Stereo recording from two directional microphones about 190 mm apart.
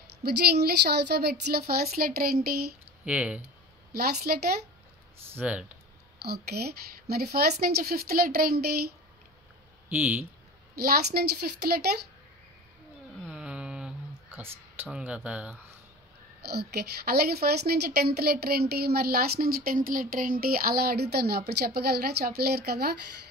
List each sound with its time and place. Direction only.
0.2 s a woman's voice: 60° right (ahead or behind)
3.1 s speech: 5° right (ahead or behind)
4.3 s a woman's voice: 50° right (ahead or behind)
5.3 s speech: 5° right (ahead or behind)
6.2 s a woman's voice: 55° right (ahead or behind)
9.8 s speech: 5° right (ahead or behind)
10.8 s a woman's voice: 55° right (ahead or behind)
13.3 s a sound: 5° right (ahead or behind)
16.4 s a woman's voice: 55° right (ahead or behind)